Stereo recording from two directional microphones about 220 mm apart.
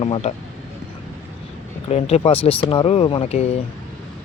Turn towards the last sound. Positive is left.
turn(degrees=30)  # may be behind; listen again after turning